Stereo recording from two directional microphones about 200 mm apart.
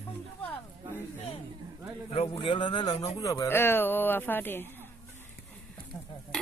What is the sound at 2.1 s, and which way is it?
A man's voice, 30° left (ahead or behind).